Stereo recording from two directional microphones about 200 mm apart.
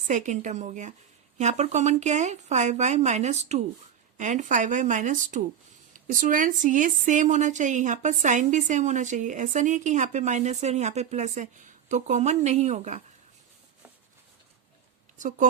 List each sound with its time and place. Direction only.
0.1 s a woman's voice: 35° right (ahead or behind)